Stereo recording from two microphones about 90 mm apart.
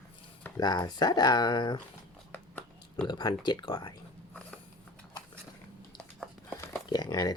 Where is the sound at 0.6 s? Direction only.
50° left (ahead or behind).